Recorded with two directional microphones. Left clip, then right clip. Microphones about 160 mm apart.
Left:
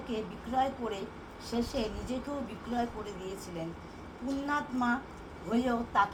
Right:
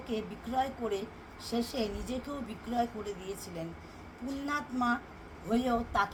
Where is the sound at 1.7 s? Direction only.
70° right (ahead or behind).